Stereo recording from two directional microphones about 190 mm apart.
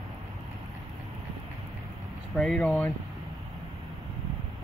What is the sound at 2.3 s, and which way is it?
Speech, centre (ahead or behind).